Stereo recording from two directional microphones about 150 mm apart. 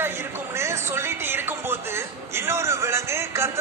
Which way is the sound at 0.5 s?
20° right (ahead or behind).